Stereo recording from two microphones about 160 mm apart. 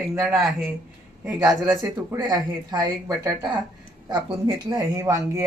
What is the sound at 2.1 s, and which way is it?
Speech, 25° right (ahead or behind).